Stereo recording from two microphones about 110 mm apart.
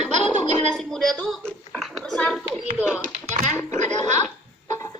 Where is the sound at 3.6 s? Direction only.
90° right.